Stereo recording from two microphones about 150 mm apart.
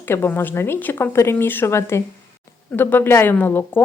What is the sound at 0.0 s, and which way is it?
A woman's voice, 15° left (ahead or behind).